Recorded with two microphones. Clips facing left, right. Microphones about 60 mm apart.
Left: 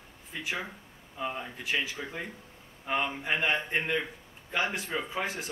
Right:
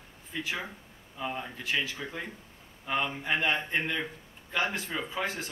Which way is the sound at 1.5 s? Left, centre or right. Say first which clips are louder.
Even; centre.